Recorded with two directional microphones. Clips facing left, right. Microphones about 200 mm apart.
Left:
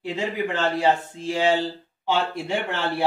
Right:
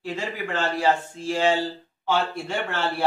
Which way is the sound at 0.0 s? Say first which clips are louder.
Left 4 dB; 15° left (ahead or behind).